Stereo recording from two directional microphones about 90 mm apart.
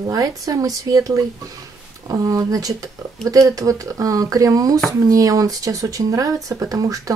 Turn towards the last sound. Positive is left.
turn(degrees=-40)  # may be behind; listen again after turning